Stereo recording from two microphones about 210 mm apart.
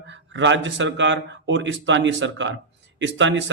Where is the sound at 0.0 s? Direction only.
60° right (ahead or behind).